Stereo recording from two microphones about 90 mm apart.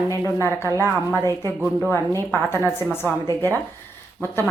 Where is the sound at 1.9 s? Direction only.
25° left (ahead or behind).